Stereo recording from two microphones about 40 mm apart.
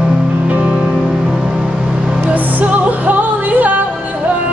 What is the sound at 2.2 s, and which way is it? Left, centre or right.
Music, right.